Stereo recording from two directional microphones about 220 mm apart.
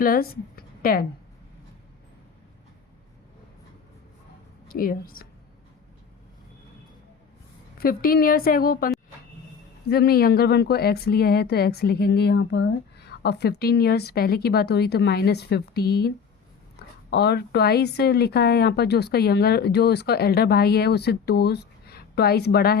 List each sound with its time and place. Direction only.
0.0 s speech: 40° left (ahead or behind)
4.7 s a woman's voice: 40° left (ahead or behind)
7.8 s a woman's voice: 45° left (ahead or behind)
9.9 s speech: 45° left (ahead or behind)